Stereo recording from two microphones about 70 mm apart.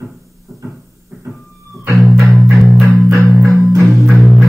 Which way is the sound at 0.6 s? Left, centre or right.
Right.